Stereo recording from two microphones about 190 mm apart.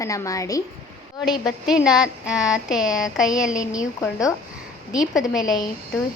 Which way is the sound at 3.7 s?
20° left (ahead or behind).